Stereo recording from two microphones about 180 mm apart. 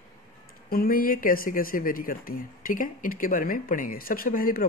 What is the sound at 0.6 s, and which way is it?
Speech, 55° left (ahead or behind).